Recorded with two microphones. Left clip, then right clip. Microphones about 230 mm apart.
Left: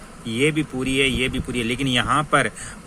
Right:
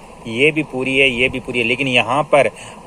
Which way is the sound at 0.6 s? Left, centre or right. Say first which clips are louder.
Right 6 dB; left.